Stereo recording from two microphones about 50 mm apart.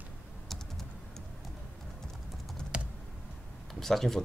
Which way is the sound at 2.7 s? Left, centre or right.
Right.